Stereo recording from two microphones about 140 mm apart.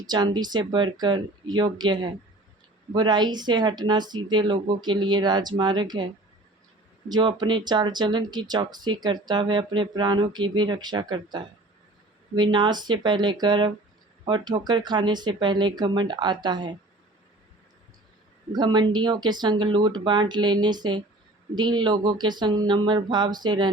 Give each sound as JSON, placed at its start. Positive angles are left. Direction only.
{"t": 0.0, "sound": "speech", "side_deg": -30}
{"t": 7.1, "sound": "speech", "side_deg": -30}
{"t": 18.5, "sound": "speech", "side_deg": -30}